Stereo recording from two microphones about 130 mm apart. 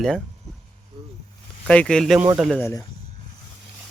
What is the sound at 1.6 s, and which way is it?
Speech, 5° left (ahead or behind).